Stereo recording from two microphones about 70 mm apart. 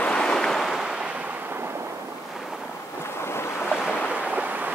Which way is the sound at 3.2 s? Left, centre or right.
Left.